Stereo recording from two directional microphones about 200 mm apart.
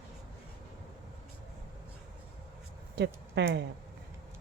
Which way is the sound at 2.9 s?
60° right (ahead or behind).